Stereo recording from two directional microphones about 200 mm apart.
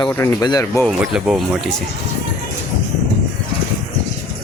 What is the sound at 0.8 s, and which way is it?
Speech, centre (ahead or behind).